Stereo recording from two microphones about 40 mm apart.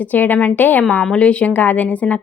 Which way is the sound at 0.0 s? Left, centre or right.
Left.